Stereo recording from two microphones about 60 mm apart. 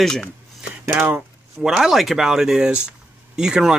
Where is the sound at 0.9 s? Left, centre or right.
Right.